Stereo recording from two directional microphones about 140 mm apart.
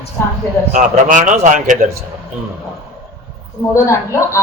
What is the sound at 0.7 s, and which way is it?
A man's voice, 65° right (ahead or behind).